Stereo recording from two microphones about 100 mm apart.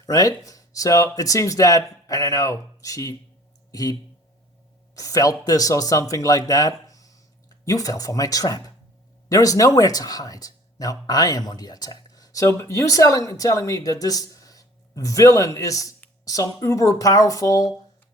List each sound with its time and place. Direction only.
0.0 s speech: 35° left (ahead or behind)
4.9 s speech: 35° left (ahead or behind)